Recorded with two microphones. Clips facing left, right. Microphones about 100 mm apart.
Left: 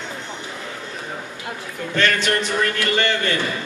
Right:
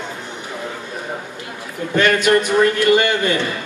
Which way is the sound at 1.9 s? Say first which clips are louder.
Right 6 dB; 15° right (ahead or behind).